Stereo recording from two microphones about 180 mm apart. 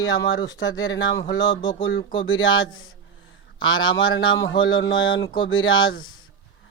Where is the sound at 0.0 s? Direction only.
90° left.